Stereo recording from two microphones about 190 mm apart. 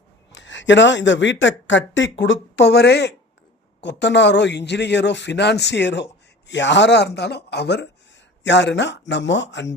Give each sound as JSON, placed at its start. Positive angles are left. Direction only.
{"t": 0.3, "sound": "speech", "side_deg": 70}